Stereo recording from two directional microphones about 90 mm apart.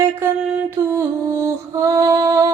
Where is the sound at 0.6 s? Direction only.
25° right (ahead or behind).